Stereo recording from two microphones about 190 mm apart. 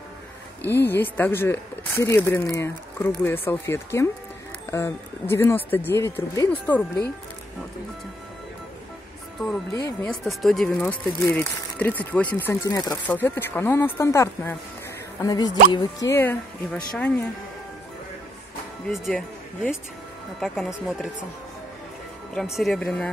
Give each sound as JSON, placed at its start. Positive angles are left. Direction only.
{"t": 0.6, "sound": "speech", "side_deg": 10}
{"t": 9.7, "sound": "speech", "side_deg": 20}
{"t": 10.0, "sound": "speech", "side_deg": 0}
{"t": 18.9, "sound": "speech", "side_deg": 0}
{"t": 22.3, "sound": "speech", "side_deg": 0}